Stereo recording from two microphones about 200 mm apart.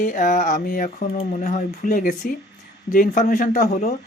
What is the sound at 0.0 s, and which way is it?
Speech, 40° left (ahead or behind).